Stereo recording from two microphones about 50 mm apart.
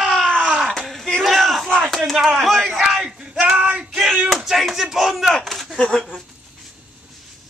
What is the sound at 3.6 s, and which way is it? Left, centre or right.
Female singing, right.